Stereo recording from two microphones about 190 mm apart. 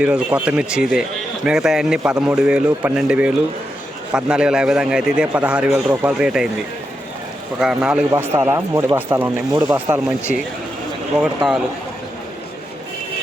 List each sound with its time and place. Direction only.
0.0 s a man's voice: 5° right (ahead or behind)
7.6 s a man's voice: 5° right (ahead or behind)
8.1 s speech: 15° right (ahead or behind)